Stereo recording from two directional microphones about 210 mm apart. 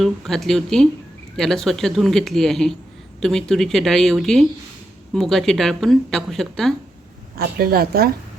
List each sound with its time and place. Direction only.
0.0 s speech: centre (ahead or behind)
7.3 s a woman's voice: 45° right (ahead or behind)